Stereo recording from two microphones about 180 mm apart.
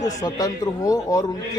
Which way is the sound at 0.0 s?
20° left (ahead or behind).